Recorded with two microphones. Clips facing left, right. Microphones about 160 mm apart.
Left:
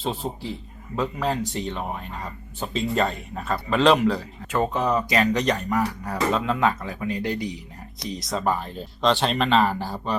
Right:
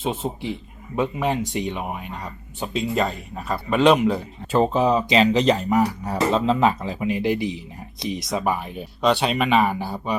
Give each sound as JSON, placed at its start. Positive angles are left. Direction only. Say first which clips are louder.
{"t": 0.0, "sound": "speech", "louder": "right 2 dB", "side_deg": 0}
{"t": 1.2, "sound": "speech", "louder": "right 2 dB", "side_deg": -20}
{"t": 4.5, "sound": "speech", "louder": "right 4 dB", "side_deg": -25}
{"t": 8.2, "sound": "speech", "louder": "even", "side_deg": 0}
{"t": 8.4, "sound": "speech", "louder": "right 1 dB", "side_deg": -10}